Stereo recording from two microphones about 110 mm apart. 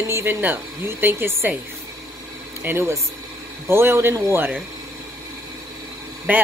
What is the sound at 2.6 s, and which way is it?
Speech, 25° right (ahead or behind).